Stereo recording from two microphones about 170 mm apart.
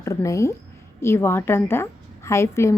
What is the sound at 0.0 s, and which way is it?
A woman's voice, 15° left (ahead or behind).